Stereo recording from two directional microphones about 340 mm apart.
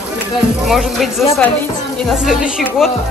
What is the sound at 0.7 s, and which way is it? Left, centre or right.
Speech, centre.